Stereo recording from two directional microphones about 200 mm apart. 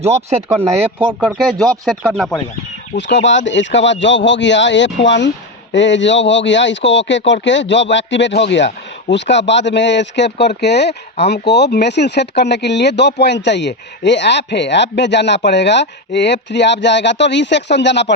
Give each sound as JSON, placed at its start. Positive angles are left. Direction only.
{"t": 0.0, "sound": "speech", "side_deg": -30}
{"t": 1.2, "sound": "speech", "side_deg": -5}
{"t": 2.9, "sound": "speech", "side_deg": 65}